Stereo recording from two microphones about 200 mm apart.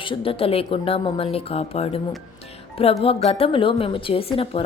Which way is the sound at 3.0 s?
30° left (ahead or behind).